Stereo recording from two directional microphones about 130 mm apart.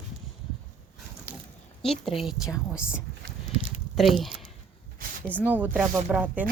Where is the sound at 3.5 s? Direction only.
50° right (ahead or behind).